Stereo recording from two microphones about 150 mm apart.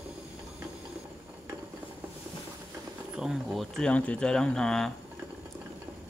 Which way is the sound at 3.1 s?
5° right (ahead or behind).